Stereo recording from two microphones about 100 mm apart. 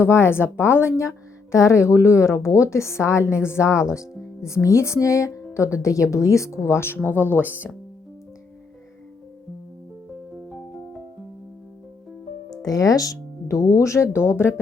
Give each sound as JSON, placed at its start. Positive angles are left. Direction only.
{"t": 0.0, "sound": "a woman's voice", "side_deg": 25}
{"t": 7.3, "sound": "speech", "side_deg": -15}
{"t": 12.5, "sound": "speech", "side_deg": 40}